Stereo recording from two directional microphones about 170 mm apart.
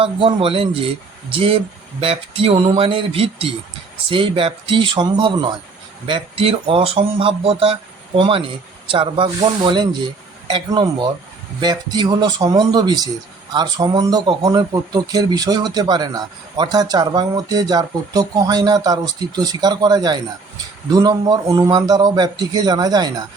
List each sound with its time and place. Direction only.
0.0 s speech: 30° right (ahead or behind)